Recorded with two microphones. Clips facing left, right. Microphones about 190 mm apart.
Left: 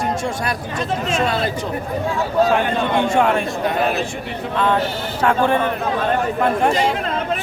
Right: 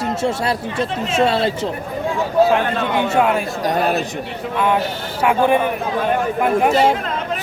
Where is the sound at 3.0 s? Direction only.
5° right (ahead or behind).